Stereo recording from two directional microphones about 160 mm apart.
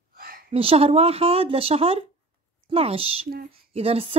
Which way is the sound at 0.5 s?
35° right (ahead or behind).